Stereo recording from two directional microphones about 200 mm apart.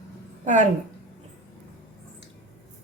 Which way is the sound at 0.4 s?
35° right (ahead or behind).